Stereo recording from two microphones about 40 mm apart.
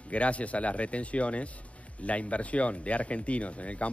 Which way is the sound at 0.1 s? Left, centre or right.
Left.